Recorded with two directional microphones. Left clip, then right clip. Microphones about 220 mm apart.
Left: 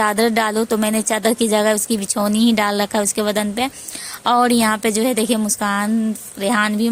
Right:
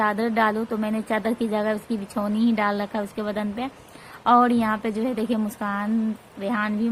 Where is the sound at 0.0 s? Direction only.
50° left (ahead or behind).